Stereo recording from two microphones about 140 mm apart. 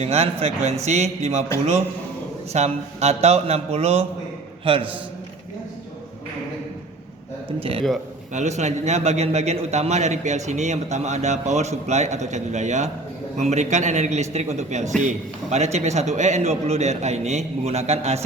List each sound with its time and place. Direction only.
0.0 s a man's voice: 50° right (ahead or behind)
2.5 s a man's voice: 50° right (ahead or behind)
7.6 s a man's voice: 40° right (ahead or behind)
8.3 s a man's voice: 55° right (ahead or behind)